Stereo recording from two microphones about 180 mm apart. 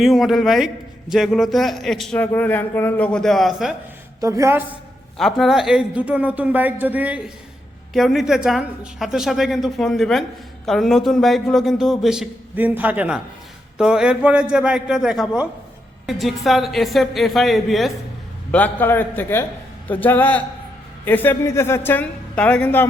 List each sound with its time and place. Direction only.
0.0 s speech: centre (ahead or behind)
4.2 s speech: 15° right (ahead or behind)
5.1 s a woman's voice: centre (ahead or behind)